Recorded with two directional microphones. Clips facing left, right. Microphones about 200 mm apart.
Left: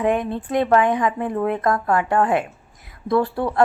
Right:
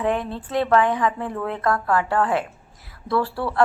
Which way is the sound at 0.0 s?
15° left (ahead or behind).